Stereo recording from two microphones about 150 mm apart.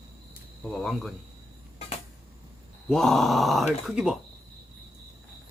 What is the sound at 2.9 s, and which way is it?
Speech, centre (ahead or behind).